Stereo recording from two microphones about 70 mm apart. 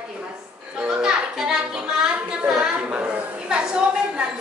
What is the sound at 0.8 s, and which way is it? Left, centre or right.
Music, centre.